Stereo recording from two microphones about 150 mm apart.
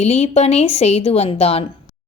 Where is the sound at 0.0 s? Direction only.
45° left (ahead or behind).